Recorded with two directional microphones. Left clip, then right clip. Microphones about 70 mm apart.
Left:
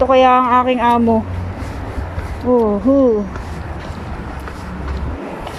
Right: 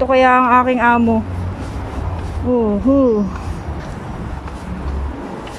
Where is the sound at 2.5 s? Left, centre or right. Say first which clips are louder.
Left 2 dB; centre.